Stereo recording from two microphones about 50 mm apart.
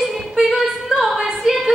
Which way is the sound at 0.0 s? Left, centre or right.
Centre.